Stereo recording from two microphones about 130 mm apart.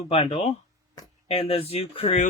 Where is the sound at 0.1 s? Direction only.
50° left (ahead or behind).